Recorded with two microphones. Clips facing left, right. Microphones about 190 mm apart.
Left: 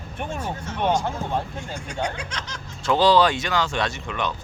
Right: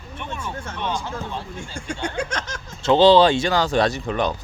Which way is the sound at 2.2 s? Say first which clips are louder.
Right 7 dB; 45° right (ahead or behind).